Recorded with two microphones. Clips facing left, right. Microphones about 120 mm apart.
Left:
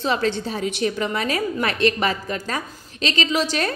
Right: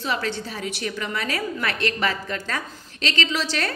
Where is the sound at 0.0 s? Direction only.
25° left (ahead or behind).